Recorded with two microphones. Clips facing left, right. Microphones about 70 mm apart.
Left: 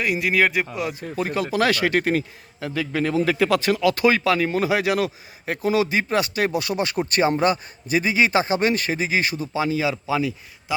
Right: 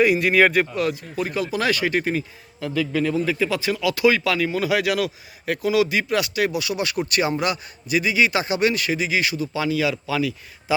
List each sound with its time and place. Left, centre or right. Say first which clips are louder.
0.0 s speech: right 4 dB; centre
1.1 s a man's voice: left 1 dB; left
3.2 s speech: left 3 dB; left